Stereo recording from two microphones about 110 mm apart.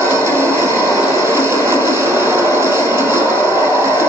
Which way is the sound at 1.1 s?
25° right (ahead or behind).